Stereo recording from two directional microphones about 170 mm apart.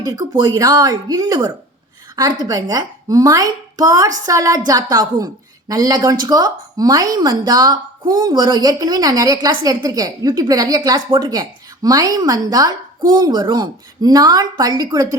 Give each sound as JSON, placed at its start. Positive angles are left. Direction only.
{"t": 0.0, "sound": "a woman's voice", "side_deg": -25}